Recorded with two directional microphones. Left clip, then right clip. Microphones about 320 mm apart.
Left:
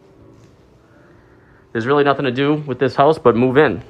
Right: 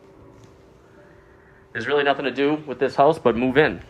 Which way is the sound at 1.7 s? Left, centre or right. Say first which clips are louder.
Left 5 dB; centre.